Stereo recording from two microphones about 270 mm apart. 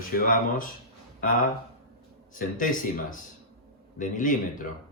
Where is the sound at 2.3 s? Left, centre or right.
Left.